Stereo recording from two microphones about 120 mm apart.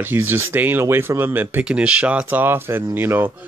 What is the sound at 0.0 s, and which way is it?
Speech, 15° right (ahead or behind).